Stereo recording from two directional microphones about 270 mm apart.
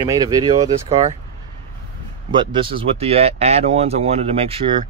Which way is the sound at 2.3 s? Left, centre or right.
Centre.